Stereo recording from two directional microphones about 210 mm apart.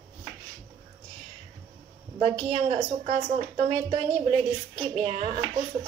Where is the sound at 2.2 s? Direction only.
30° right (ahead or behind).